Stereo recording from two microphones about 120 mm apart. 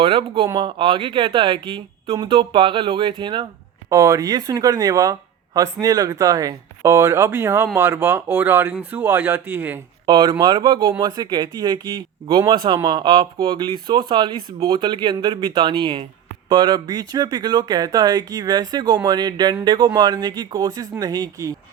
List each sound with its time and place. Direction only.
0.0 s speech: 50° right (ahead or behind)
3.8 s speech: 30° right (ahead or behind)
10.1 s speech: 40° right (ahead or behind)